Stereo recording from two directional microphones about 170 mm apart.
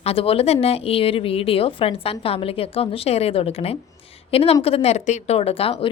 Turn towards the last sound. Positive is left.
turn(degrees=35)  # may be behind; listen again after turning